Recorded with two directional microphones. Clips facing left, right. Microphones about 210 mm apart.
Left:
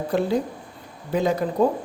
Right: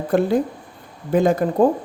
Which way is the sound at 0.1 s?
50° right (ahead or behind).